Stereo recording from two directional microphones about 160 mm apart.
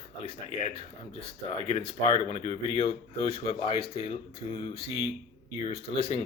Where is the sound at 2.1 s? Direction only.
35° left (ahead or behind).